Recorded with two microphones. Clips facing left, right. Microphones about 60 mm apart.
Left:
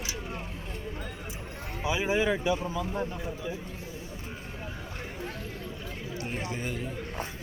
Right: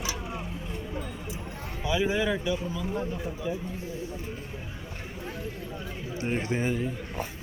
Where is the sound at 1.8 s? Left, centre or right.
Centre.